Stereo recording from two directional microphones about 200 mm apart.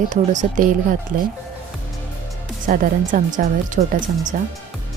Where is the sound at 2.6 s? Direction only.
40° right (ahead or behind).